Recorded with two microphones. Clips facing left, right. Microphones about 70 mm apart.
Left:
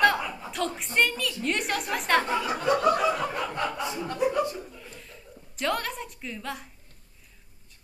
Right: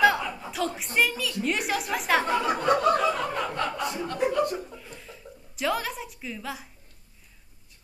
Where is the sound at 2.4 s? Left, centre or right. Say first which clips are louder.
Right 2 dB; right.